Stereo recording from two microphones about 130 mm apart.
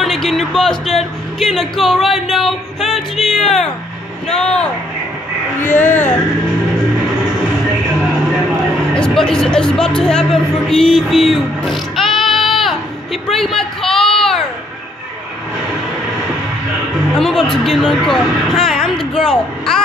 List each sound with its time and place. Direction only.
0.0 s speech: centre (ahead or behind)
5.6 s speech: 15° left (ahead or behind)
8.9 s speech: 5° left (ahead or behind)
17.1 s speech: 5° left (ahead or behind)